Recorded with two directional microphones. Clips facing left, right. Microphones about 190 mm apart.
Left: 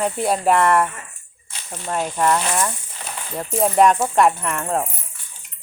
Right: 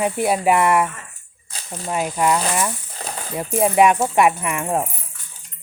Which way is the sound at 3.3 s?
10° right (ahead or behind).